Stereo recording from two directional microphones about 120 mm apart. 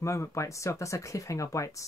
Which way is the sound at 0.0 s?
25° left (ahead or behind).